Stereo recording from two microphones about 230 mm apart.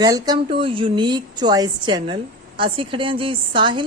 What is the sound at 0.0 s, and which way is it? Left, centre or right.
A woman's voice, centre.